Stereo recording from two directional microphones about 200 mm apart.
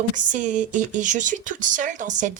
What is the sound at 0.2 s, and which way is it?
Speech, 40° right (ahead or behind).